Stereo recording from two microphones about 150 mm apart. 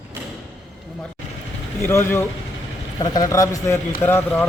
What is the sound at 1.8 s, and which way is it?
Speech, 15° left (ahead or behind).